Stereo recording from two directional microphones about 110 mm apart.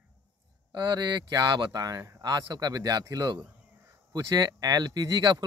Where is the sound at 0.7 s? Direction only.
40° right (ahead or behind).